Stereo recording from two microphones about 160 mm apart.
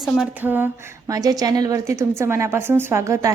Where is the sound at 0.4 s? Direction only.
10° right (ahead or behind).